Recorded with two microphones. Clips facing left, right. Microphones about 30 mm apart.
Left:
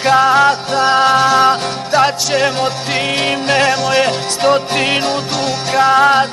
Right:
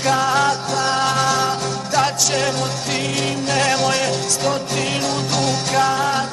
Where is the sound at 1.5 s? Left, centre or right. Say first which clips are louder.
Left 7 dB; left.